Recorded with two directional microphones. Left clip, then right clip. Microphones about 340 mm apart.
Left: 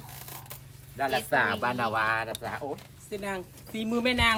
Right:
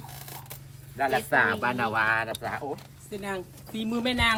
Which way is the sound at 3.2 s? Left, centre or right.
Centre.